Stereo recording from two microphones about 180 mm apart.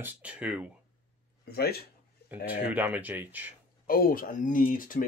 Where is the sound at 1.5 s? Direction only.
60° left (ahead or behind).